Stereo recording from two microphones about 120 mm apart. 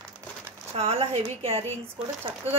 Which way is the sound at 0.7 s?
55° right (ahead or behind).